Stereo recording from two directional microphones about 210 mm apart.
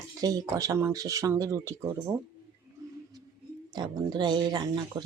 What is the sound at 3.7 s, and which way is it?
Speech, 20° right (ahead or behind).